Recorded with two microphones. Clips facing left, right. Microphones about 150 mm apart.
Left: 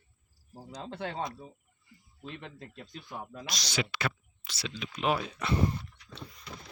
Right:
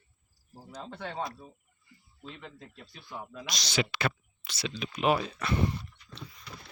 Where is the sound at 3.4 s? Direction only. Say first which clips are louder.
Right 3 dB; 25° right (ahead or behind); by 5.3 s 5° right (ahead or behind).